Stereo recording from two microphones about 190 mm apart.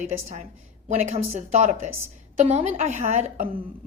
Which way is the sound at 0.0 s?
40° right (ahead or behind).